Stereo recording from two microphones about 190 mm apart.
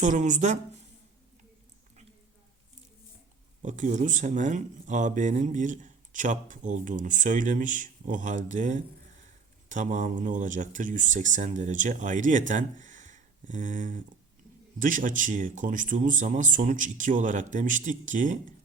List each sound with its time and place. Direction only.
0.0 s speech: 40° right (ahead or behind)
3.6 s speech: 40° right (ahead or behind)